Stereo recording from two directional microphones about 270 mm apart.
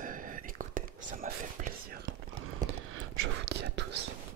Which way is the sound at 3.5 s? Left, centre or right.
Right.